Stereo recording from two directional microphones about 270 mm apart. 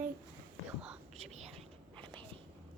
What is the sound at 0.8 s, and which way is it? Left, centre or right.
Whispering, centre.